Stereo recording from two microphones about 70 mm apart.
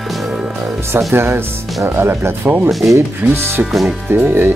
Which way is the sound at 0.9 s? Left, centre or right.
Right.